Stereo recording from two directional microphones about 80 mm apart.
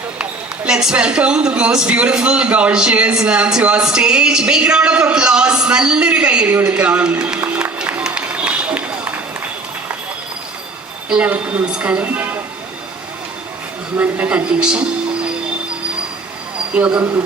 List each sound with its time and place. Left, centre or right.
0.2 s speech: centre
11.1 s a woman's voice: centre
14.0 s a woman's voice: centre
16.7 s a woman's voice: centre